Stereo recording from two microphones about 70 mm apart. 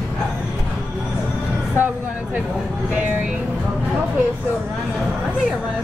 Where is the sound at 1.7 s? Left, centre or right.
Right.